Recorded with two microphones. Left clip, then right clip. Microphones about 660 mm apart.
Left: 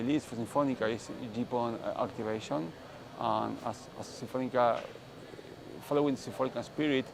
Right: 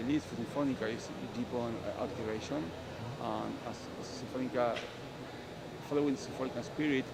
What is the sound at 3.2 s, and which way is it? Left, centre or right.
Speech, left.